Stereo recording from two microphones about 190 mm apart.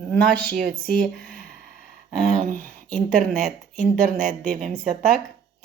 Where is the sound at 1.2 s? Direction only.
50° right (ahead or behind).